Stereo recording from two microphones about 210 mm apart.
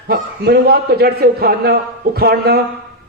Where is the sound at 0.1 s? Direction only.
50° right (ahead or behind).